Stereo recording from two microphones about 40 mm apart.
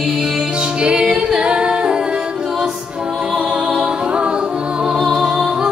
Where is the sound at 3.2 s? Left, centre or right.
Centre.